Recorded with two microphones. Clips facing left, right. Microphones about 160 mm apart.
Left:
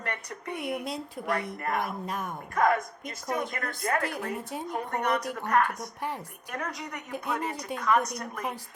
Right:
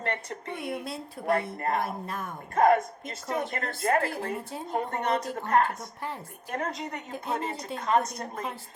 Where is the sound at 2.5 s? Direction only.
25° right (ahead or behind).